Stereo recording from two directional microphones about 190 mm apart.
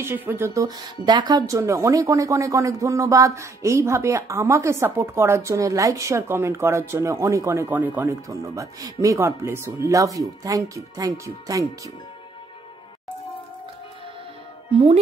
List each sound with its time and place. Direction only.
0.0 s speech: 10° right (ahead or behind)